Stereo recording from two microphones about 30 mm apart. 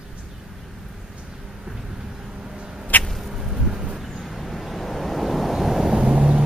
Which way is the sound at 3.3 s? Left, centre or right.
Right.